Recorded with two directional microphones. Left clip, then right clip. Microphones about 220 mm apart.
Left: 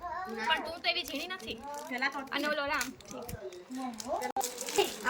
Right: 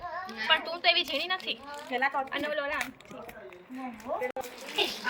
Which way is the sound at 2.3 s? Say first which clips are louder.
Right 1 dB; 15° left (ahead or behind).